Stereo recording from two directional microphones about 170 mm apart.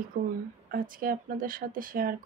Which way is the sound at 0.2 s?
70° right (ahead or behind).